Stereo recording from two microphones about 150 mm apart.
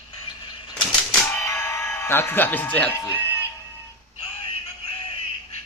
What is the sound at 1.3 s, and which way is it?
Music, 15° left (ahead or behind).